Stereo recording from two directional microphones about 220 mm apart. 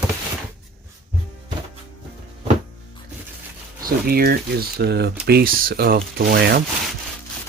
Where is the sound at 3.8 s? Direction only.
45° right (ahead or behind).